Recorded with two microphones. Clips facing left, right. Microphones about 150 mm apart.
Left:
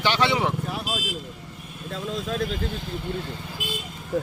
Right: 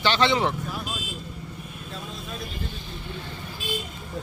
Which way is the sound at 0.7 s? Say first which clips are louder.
Left 3 dB; 85° left.